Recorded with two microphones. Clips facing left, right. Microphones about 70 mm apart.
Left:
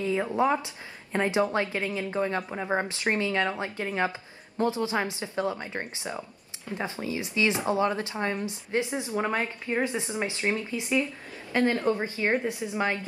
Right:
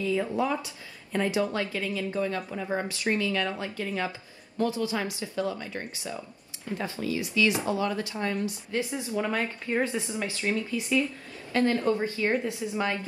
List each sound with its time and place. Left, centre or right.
0.0 s a woman's voice: left